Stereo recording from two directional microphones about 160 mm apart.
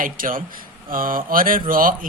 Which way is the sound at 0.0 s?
60° right (ahead or behind).